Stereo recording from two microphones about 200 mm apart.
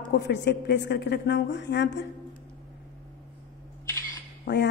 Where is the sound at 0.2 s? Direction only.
60° left (ahead or behind).